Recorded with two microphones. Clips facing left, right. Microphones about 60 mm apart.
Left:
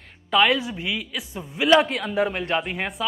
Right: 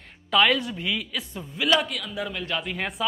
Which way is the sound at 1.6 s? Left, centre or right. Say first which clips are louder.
Left 6 dB; left.